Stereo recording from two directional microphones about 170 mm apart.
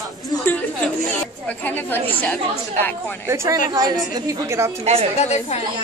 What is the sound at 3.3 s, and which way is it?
A woman's voice, 15° right (ahead or behind).